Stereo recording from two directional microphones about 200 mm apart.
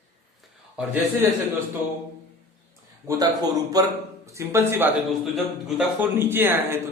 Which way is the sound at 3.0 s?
20° right (ahead or behind).